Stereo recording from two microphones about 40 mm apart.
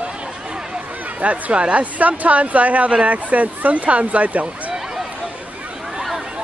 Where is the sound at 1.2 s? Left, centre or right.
Right.